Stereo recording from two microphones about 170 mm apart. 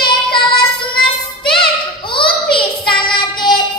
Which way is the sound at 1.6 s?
30° left (ahead or behind).